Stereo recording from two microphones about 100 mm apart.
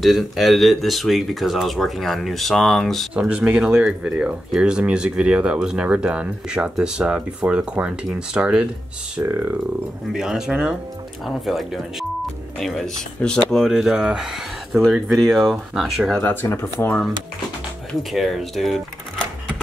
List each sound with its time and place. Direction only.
0.0 s speech: centre (ahead or behind)
3.2 s speech: 10° right (ahead or behind)
9.2 s speech: 25° right (ahead or behind)
10.1 s speech: 5° right (ahead or behind)
16.2 s speech: 15° left (ahead or behind)
18.1 s speech: centre (ahead or behind)